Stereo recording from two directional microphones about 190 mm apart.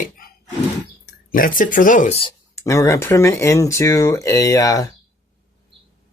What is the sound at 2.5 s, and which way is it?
Speech, 15° left (ahead or behind).